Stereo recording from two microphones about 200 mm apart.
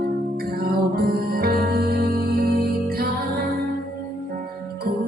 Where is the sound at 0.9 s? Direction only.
50° right (ahead or behind).